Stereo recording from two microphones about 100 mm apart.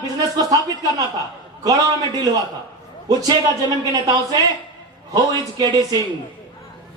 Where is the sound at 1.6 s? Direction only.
35° right (ahead or behind).